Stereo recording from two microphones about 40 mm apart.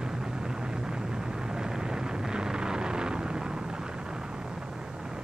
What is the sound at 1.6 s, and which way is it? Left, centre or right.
Vehicle, centre.